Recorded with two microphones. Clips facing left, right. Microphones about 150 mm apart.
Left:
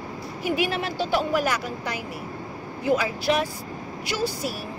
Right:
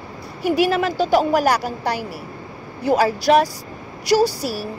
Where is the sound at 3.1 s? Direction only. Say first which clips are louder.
Right 8 dB; 40° right (ahead or behind).